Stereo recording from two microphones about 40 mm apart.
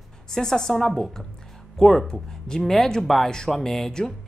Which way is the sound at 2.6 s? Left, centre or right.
Centre.